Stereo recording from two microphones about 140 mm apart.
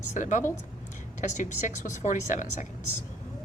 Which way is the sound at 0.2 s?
65° left (ahead or behind).